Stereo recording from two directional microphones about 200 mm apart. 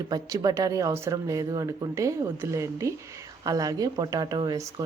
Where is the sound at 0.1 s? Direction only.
20° right (ahead or behind).